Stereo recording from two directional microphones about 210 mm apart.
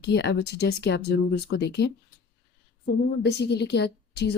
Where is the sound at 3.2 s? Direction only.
55° left (ahead or behind).